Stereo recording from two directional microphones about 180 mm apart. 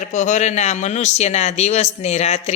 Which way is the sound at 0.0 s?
40° left (ahead or behind).